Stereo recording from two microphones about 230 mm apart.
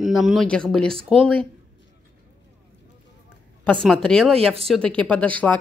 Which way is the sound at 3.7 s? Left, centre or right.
Centre.